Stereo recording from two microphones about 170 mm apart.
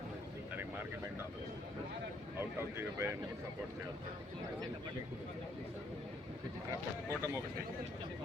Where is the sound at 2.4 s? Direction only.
15° right (ahead or behind).